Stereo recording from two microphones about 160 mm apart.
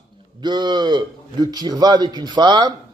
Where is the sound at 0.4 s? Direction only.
25° right (ahead or behind).